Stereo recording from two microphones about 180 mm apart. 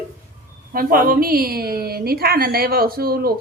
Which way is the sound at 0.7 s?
55° right (ahead or behind).